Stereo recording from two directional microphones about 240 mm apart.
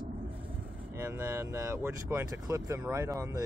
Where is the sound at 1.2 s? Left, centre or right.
Centre.